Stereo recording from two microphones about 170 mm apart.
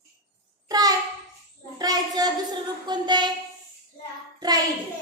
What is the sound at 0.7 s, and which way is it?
Child singing, 20° right (ahead or behind).